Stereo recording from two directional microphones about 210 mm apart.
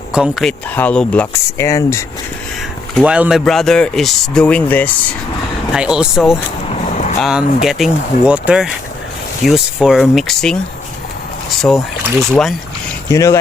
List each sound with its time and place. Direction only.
0.1 s speech: 5° right (ahead or behind); by 2.0 s 15° left (ahead or behind)
2.9 s speech: 5° right (ahead or behind)
5.7 s speech: 5° right (ahead or behind)
6.7 s vehicle: 30° left (ahead or behind)
7.2 s speech: centre (ahead or behind)
11.6 s speech: centre (ahead or behind)
13.1 s speech: 15° left (ahead or behind)